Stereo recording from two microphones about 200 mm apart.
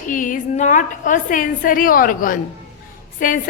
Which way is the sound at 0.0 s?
40° left (ahead or behind).